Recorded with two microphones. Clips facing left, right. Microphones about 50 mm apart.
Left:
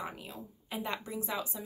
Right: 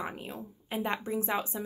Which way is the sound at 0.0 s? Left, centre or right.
Right.